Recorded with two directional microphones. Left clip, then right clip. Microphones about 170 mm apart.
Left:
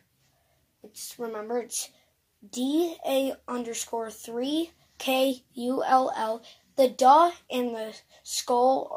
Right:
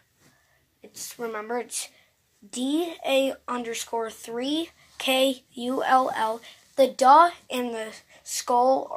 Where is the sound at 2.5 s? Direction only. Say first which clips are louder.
Right 1 dB; 30° right (ahead or behind).